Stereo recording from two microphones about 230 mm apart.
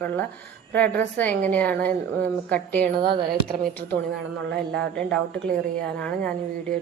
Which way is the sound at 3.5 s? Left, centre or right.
Centre.